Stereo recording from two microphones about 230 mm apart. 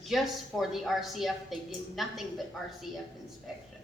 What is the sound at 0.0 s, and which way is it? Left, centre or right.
A woman's voice, centre.